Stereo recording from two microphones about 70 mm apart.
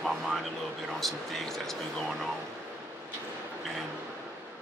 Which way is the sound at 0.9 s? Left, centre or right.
Centre.